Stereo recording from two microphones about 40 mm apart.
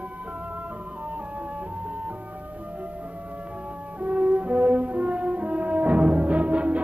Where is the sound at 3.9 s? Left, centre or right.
Right.